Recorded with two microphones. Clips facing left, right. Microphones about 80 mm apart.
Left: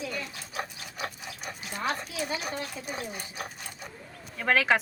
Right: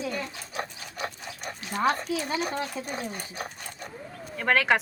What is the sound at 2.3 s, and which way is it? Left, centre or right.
Speech, right.